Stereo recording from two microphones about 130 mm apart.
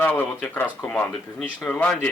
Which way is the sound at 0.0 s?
10° left (ahead or behind).